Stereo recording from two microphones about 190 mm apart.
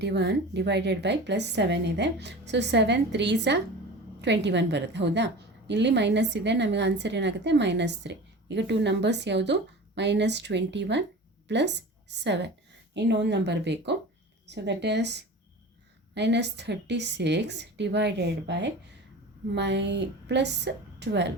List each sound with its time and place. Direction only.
0.0 s a woman's voice: 60° right (ahead or behind)